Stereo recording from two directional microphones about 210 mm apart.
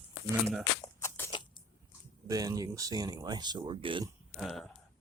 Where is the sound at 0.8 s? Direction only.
10° left (ahead or behind).